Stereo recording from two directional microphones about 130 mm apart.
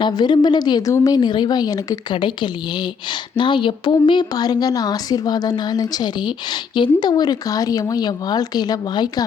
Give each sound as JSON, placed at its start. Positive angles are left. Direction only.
{"t": 0.0, "sound": "a woman's voice", "side_deg": 35}